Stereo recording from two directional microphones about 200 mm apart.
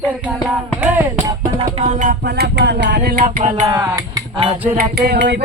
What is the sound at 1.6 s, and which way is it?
Music, 40° right (ahead or behind).